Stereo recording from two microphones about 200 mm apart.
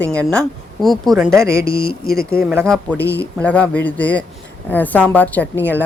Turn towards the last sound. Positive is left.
turn(degrees=10)  # may be behind; listen again after turning